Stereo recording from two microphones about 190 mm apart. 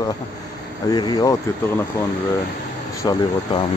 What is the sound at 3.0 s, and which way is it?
Speech, 20° left (ahead or behind).